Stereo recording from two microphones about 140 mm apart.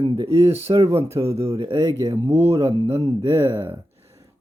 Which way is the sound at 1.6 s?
35° right (ahead or behind).